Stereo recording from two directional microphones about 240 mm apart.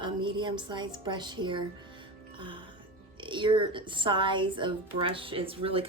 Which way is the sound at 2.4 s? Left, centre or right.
Right.